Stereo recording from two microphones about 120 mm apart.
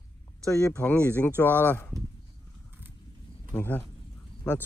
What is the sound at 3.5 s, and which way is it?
Speech, 15° left (ahead or behind).